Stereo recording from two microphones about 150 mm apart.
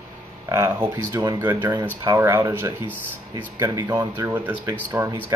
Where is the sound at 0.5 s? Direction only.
20° right (ahead or behind).